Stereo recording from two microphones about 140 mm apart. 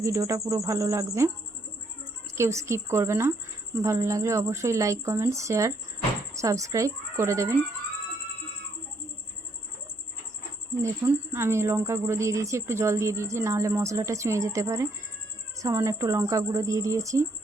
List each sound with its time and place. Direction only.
0.0 s a woman's voice: 20° right (ahead or behind)
2.3 s a woman's voice: 20° right (ahead or behind)
10.8 s a woman's voice: 20° right (ahead or behind)